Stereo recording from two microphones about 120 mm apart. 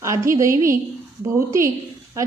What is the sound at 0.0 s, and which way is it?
A woman's voice, 25° right (ahead or behind).